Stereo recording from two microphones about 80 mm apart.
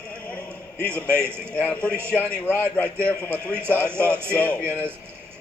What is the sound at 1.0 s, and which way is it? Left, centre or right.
Speech, right.